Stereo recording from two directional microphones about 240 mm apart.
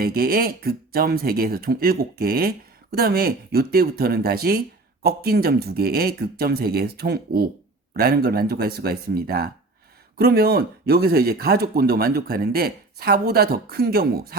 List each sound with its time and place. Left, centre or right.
0.0 s speech: right